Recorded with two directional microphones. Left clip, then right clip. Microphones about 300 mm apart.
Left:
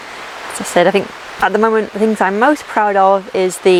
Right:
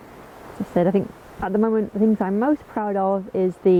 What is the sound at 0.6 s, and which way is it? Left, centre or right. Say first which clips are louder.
Speech: left 9 dB; centre.